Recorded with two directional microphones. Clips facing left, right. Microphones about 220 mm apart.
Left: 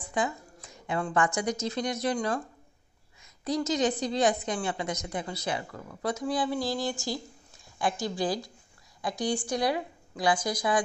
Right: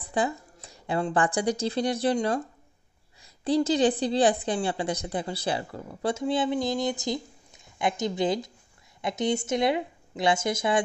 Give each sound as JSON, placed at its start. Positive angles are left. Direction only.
{"t": 0.1, "sound": "a woman's voice", "side_deg": -35}